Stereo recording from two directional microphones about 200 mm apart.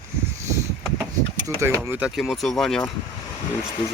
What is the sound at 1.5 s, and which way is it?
Speech, 10° right (ahead or behind).